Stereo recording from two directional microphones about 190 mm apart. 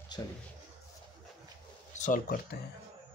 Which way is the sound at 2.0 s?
45° left (ahead or behind).